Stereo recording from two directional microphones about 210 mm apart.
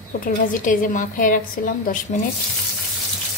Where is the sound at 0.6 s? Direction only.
40° left (ahead or behind).